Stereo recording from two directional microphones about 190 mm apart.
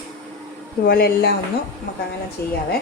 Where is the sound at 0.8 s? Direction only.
55° left (ahead or behind).